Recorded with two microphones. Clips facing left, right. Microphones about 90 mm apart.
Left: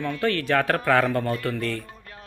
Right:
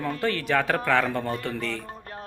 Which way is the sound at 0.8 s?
5° left (ahead or behind).